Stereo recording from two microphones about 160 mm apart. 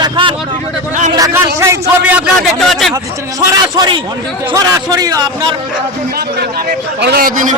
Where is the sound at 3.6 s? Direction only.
25° right (ahead or behind).